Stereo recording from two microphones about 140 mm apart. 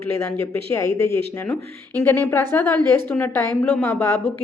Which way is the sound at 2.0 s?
15° left (ahead or behind).